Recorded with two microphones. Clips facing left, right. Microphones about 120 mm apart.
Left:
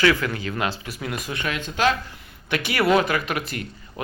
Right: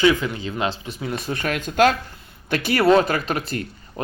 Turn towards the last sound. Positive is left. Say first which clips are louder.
# right 2 dB
turn(degrees=-35)  # may be behind; listen again after turning